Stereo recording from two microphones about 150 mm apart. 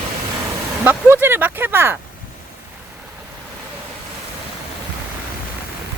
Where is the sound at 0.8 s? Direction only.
15° right (ahead or behind).